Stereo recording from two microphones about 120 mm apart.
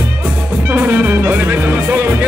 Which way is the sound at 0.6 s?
15° right (ahead or behind).